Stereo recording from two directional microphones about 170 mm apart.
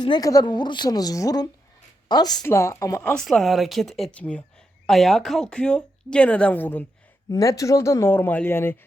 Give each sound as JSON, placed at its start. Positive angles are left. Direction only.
{"t": 0.0, "sound": "a woman's voice", "side_deg": 25}
{"t": 3.0, "sound": "speech", "side_deg": 5}